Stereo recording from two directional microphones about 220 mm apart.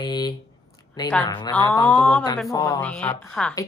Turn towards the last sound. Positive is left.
turn(degrees=5)  # may be behind; listen again after turning